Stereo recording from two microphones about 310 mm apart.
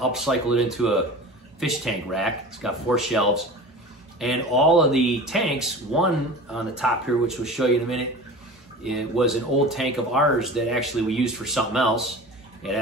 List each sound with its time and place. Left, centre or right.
0.0 s speech: centre